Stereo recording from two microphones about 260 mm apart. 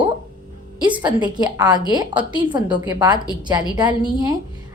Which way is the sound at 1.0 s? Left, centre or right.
Centre.